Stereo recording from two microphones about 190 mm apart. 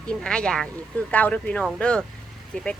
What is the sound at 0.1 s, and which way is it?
Speech, 5° left (ahead or behind).